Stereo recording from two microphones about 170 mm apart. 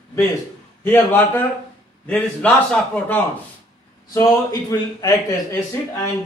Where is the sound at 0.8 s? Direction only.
10° left (ahead or behind).